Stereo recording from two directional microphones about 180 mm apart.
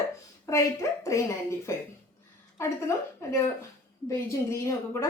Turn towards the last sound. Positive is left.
turn(degrees=15)  # may be behind; listen again after turning